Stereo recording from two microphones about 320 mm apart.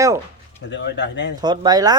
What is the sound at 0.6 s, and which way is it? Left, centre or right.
Speech, left.